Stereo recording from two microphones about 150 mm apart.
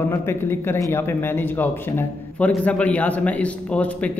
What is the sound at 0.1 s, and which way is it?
Speech, 15° left (ahead or behind).